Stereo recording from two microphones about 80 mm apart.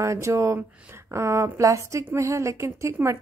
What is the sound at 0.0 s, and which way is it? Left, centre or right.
Speech, right.